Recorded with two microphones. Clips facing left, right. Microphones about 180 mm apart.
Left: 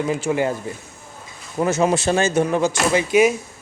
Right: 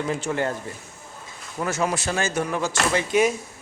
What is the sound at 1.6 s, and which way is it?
Speech, 20° left (ahead or behind).